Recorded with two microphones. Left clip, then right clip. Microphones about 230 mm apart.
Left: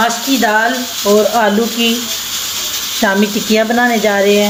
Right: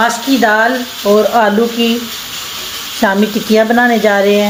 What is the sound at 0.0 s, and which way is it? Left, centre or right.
Speech, centre.